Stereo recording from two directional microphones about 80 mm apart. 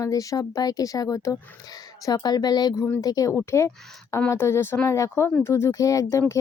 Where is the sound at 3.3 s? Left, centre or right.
Left.